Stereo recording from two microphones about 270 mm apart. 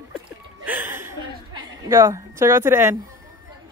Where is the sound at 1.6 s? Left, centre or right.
Centre.